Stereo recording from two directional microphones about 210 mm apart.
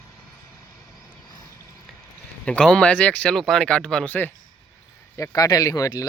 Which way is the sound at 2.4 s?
5° left (ahead or behind).